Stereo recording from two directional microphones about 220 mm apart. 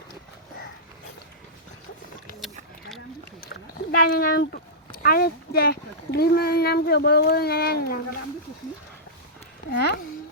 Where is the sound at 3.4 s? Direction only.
40° left (ahead or behind).